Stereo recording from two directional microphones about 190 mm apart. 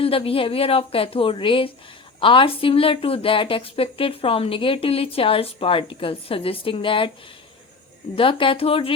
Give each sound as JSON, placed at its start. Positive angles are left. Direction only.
{"t": 0.0, "sound": "a woman's voice", "side_deg": 30}
{"t": 8.1, "sound": "a woman's voice", "side_deg": 30}